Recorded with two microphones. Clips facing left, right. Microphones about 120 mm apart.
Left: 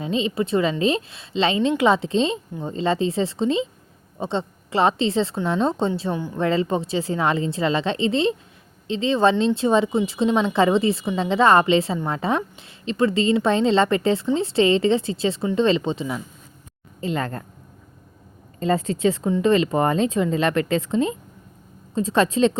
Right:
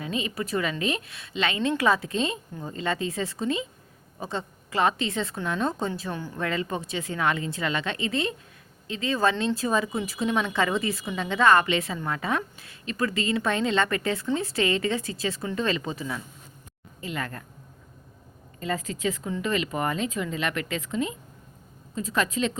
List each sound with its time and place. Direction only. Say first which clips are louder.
0.0 s speech: left 7 dB; 25° left (ahead or behind)
17.0 s speech: left 8 dB; 30° left (ahead or behind)
18.6 s speech: left 8 dB; 30° left (ahead or behind)